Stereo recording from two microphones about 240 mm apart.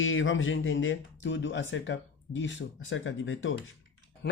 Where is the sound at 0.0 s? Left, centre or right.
Left.